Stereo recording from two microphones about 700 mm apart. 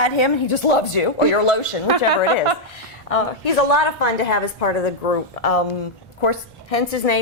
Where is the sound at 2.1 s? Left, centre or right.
Right.